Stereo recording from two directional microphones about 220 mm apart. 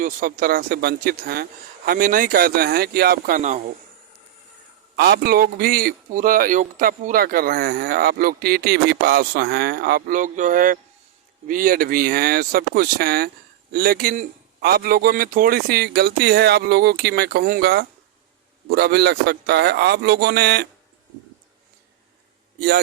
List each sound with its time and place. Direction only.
0.0 s speech: 35° right (ahead or behind)
4.9 s a man's voice: 45° right (ahead or behind)